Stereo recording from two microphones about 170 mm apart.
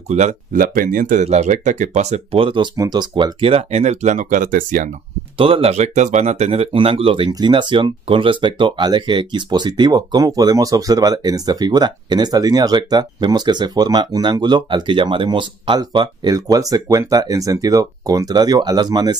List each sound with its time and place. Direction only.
0.1 s speech: 45° right (ahead or behind)
1.2 s speech: 40° right (ahead or behind)
5.4 s speech: 35° right (ahead or behind)